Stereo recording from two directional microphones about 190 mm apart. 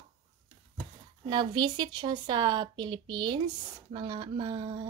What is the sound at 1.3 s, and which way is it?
A woman's voice, 25° right (ahead or behind).